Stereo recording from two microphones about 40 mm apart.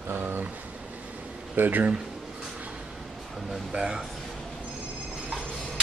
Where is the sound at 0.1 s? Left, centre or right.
Right.